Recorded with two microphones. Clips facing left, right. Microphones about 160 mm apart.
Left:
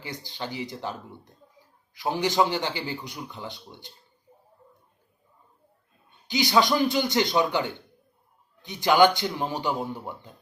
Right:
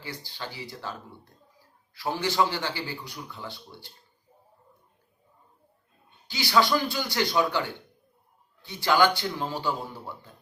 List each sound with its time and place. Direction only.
0.0 s speech: 20° left (ahead or behind)
6.2 s a man's voice: 20° left (ahead or behind)